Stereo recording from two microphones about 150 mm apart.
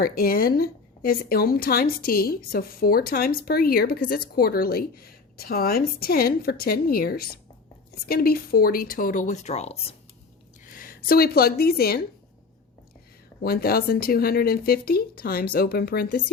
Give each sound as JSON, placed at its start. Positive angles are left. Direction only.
{"t": 0.0, "sound": "a woman's voice", "side_deg": 75}
{"t": 10.7, "sound": "speech", "side_deg": 70}
{"t": 13.4, "sound": "a woman's voice", "side_deg": 90}